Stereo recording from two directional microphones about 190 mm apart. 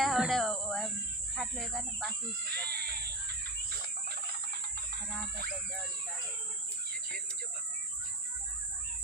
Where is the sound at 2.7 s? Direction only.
55° right (ahead or behind).